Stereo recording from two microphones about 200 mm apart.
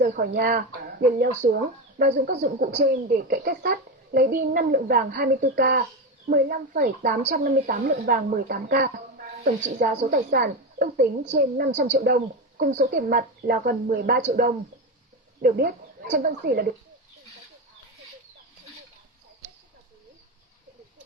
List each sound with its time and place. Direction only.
0.0 s a woman's voice: 45° right (ahead or behind)